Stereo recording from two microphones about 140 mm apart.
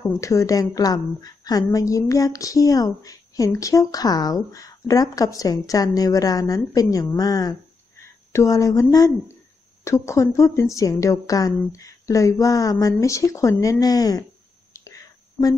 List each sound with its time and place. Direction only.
0.0 s a woman's voice: 20° left (ahead or behind)